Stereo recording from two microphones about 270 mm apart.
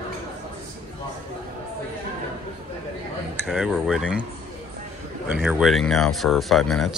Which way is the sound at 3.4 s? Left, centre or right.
Centre.